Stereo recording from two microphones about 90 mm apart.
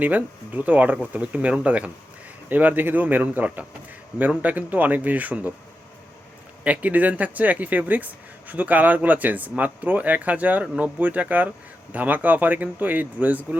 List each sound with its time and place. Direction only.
0.0 s speech: 20° right (ahead or behind)
6.7 s speech: 15° right (ahead or behind)